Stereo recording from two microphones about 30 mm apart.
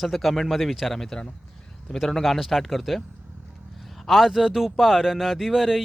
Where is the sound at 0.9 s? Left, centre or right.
Centre.